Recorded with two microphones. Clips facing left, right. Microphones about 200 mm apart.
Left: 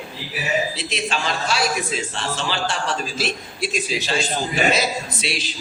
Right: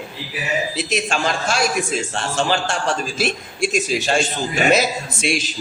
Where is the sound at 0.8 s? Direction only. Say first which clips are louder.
Right 4 dB; 45° right (ahead or behind).